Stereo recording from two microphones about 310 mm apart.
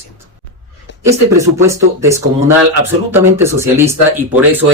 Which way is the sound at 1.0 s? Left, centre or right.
Centre.